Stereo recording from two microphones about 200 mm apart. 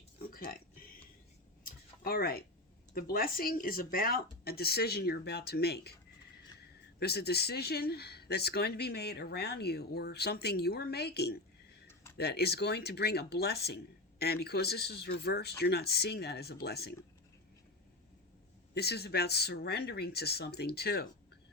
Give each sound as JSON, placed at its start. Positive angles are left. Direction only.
{"t": 0.2, "sound": "music", "side_deg": 45}
{"t": 1.6, "sound": "a sound", "side_deg": 45}
{"t": 2.9, "sound": "speech", "side_deg": 45}
{"t": 7.0, "sound": "speech", "side_deg": 55}
{"t": 18.7, "sound": "speech", "side_deg": 55}